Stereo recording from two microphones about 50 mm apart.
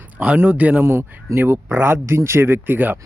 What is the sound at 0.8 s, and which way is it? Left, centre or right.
A man's voice, right.